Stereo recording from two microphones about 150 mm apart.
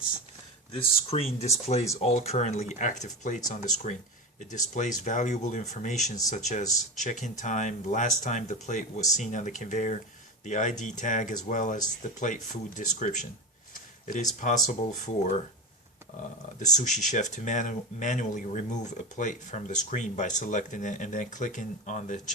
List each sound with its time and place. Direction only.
0.7 s speech: 40° left (ahead or behind)
4.4 s speech: 55° left (ahead or behind)
14.3 s speech: 55° left (ahead or behind)
16.6 s speech: 55° left (ahead or behind)